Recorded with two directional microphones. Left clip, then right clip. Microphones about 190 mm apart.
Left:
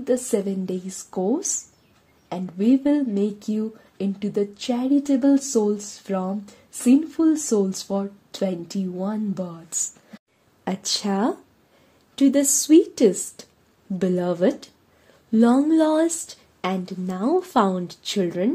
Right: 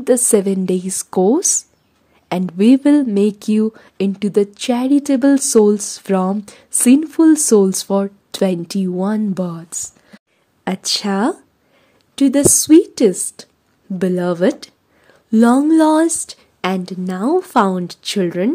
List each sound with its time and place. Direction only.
0.0 s speech: 45° right (ahead or behind)
10.6 s a woman's voice: 30° right (ahead or behind)
13.4 s a sound: 30° right (ahead or behind)
13.9 s a woman's voice: 30° right (ahead or behind)